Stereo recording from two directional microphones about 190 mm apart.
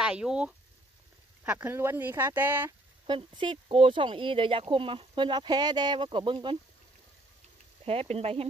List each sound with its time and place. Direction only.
0.0 s speech: 5° right (ahead or behind)
3.1 s speech: 25° right (ahead or behind)
7.8 s speech: 30° right (ahead or behind)